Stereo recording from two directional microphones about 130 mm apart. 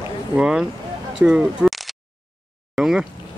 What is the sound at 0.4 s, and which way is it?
Speech, 5° right (ahead or behind).